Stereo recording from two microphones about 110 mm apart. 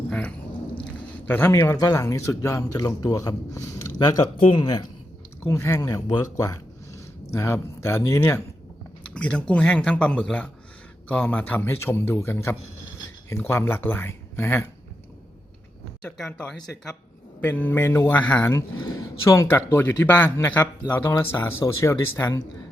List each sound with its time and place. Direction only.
0.1 s a sound: 10° left (ahead or behind)
1.7 s speech: 35° left (ahead or behind)
5.4 s speech: 25° left (ahead or behind)
9.1 s a man's voice: 10° left (ahead or behind)
16.0 s speech: 5° left (ahead or behind)
17.4 s a man's voice: 15° left (ahead or behind)
18.8 s speech: 35° left (ahead or behind)